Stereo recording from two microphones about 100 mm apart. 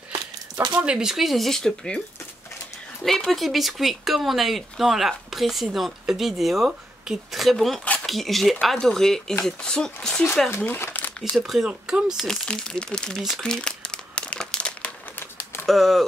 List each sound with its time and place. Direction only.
0.1 s a sound: 50° right (ahead or behind)
0.7 s speech: 10° right (ahead or behind)
3.0 s speech: 5° left (ahead or behind)
7.8 s a sound: 15° left (ahead or behind)
8.1 s speech: centre (ahead or behind)
10.5 s speech: 20° left (ahead or behind)
11.3 s speech: centre (ahead or behind)
12.3 s speech: 5° left (ahead or behind)
13.2 s crumpling: 5° left (ahead or behind)
15.6 s speech: centre (ahead or behind)